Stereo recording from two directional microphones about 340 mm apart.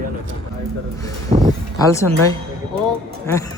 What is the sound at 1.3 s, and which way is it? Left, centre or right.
Speech, centre.